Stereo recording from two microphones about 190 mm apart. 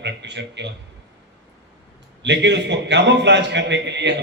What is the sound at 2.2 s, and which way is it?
A man's voice, 65° right (ahead or behind).